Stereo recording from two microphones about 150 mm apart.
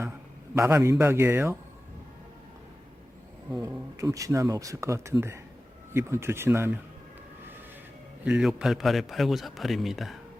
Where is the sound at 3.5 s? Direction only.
20° right (ahead or behind).